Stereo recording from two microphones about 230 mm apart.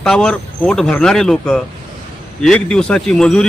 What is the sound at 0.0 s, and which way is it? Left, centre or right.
A man's voice, centre.